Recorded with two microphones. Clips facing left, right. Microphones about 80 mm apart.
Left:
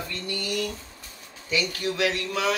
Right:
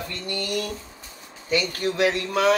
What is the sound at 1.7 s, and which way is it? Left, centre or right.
Speech, right.